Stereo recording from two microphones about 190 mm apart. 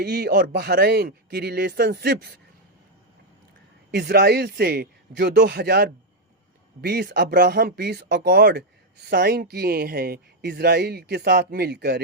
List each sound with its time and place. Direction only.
0.0 s speech: 60° right (ahead or behind)
3.9 s speech: 60° right (ahead or behind)